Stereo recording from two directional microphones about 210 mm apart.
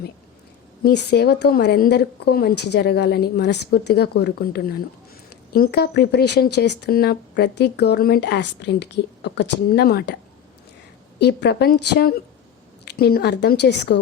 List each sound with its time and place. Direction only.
0.9 s speech: 50° left (ahead or behind)
11.2 s speech: 50° left (ahead or behind)